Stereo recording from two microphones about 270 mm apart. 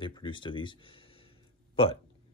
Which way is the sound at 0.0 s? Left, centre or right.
Centre.